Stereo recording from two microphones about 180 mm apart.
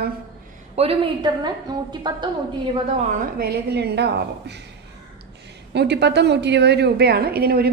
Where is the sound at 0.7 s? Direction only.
30° right (ahead or behind).